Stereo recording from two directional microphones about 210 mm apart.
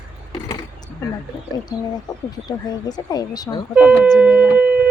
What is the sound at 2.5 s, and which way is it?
Speech, 20° left (ahead or behind).